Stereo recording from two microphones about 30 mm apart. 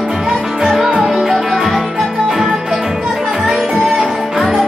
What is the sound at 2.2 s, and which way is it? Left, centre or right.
Music, right.